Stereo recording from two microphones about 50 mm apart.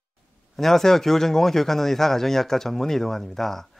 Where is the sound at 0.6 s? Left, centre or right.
Centre.